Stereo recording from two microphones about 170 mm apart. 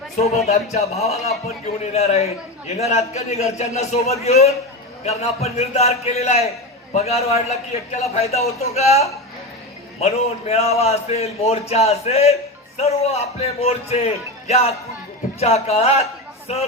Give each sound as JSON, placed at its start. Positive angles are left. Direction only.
{"t": 0.4, "sound": "speech", "side_deg": 40}